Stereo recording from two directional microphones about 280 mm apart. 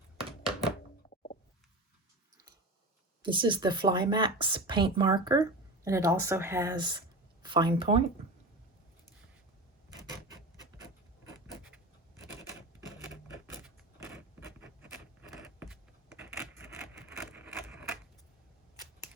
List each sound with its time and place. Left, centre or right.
0.2 s thunk: centre
3.2 s speech: centre
14.3 s a sound: centre